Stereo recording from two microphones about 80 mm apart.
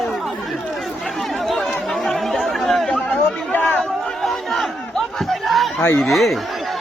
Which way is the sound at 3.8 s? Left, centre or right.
Centre.